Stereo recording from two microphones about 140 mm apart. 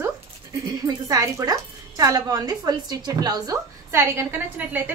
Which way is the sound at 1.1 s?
25° right (ahead or behind).